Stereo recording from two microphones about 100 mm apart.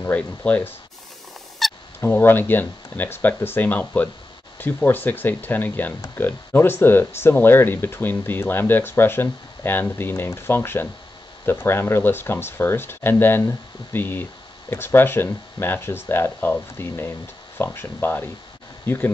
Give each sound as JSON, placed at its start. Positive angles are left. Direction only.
{"t": 0.0, "sound": "speech", "side_deg": 15}
{"t": 1.6, "sound": "honk", "side_deg": 0}
{"t": 2.0, "sound": "speech", "side_deg": 20}